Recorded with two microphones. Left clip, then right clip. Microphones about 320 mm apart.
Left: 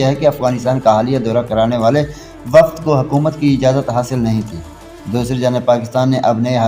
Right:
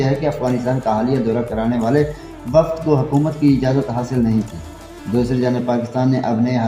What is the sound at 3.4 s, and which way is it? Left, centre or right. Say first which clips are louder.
A man's voice: left 3 dB; left.